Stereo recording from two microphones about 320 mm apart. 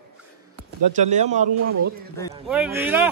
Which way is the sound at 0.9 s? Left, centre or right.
Right.